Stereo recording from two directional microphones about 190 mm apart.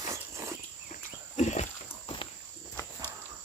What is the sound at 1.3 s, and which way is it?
Dog, 35° left (ahead or behind).